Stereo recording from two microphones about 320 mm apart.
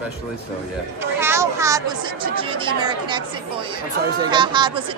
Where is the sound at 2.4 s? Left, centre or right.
Centre.